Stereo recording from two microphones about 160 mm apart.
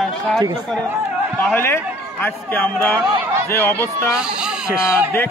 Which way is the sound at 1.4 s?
10° left (ahead or behind).